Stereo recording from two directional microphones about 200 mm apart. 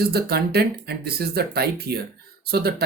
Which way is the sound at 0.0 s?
50° right (ahead or behind).